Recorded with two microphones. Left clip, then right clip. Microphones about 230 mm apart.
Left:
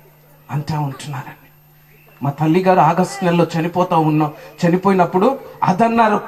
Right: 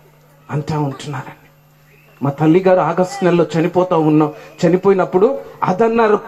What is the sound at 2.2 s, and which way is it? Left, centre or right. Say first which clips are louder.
A man's voice: right 2 dB; left.